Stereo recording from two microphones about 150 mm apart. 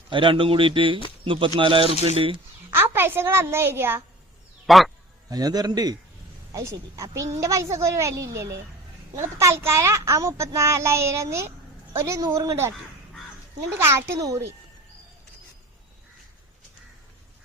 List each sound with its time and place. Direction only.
0.1 s speech: 35° right (ahead or behind)
2.7 s a woman's voice: 15° right (ahead or behind)
4.6 s speech: centre (ahead or behind)
5.3 s a child's voice: 25° right (ahead or behind)
13.7 s a woman's voice: 15° right (ahead or behind)